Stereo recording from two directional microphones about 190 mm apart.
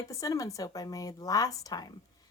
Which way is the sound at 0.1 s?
20° left (ahead or behind).